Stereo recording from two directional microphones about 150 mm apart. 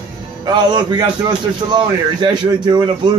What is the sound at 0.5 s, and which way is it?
A man's voice, 30° right (ahead or behind).